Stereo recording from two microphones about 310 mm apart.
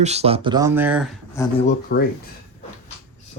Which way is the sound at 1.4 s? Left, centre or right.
Centre.